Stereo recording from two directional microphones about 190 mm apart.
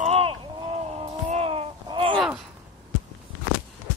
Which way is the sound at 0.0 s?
30° right (ahead or behind).